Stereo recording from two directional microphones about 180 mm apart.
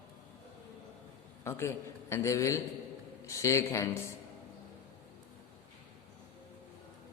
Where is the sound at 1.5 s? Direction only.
15° left (ahead or behind).